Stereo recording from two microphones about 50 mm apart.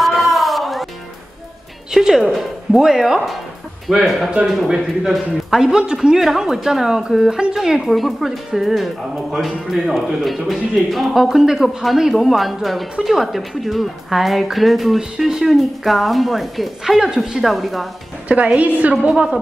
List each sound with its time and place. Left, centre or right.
0.0 s music: centre
2.0 s speech: centre
5.7 s speech: centre
7.8 s speech: centre
15.0 s speech: centre
18.3 s a woman's voice: right
19.0 s speech: centre